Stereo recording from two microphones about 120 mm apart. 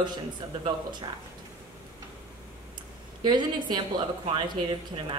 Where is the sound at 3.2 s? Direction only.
35° right (ahead or behind).